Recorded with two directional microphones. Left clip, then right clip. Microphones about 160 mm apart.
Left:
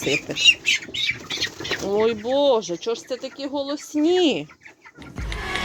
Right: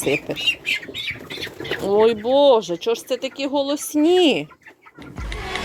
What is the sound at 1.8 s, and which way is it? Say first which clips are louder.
Speech: right 5 dB; 15° right (ahead or behind).